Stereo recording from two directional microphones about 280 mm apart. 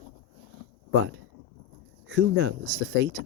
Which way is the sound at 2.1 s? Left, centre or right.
Right.